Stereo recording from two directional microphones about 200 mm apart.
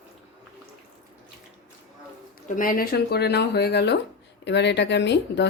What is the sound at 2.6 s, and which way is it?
A woman's voice, 45° left (ahead or behind).